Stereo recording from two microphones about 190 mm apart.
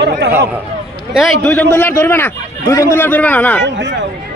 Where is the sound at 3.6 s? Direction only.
65° right (ahead or behind).